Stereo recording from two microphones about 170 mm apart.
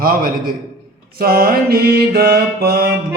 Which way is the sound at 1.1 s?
65° right (ahead or behind).